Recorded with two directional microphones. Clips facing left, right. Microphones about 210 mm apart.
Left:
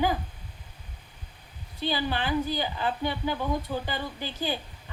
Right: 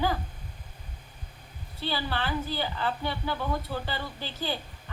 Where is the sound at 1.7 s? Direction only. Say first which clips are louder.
Left 3 dB; 15° left (ahead or behind).